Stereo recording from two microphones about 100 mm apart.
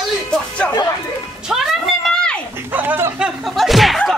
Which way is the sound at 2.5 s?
20° right (ahead or behind).